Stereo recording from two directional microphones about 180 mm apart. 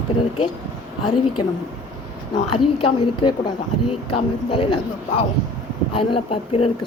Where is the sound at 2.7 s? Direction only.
30° left (ahead or behind).